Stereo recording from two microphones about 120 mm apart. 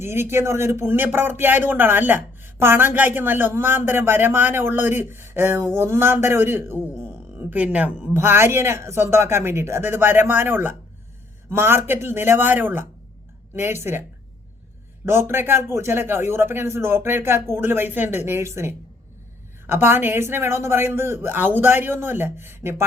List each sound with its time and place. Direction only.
0.0 s speech: 20° right (ahead or behind)
15.0 s speech: 20° right (ahead or behind)